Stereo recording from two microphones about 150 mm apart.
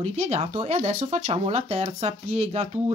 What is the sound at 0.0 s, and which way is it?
Speech, 50° right (ahead or behind).